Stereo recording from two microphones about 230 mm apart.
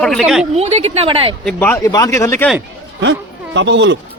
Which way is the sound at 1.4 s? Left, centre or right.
Centre.